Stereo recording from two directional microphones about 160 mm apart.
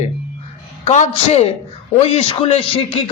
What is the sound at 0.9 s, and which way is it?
A man's voice, 40° left (ahead or behind).